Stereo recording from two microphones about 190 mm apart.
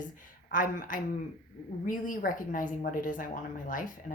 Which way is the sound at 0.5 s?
45° left (ahead or behind).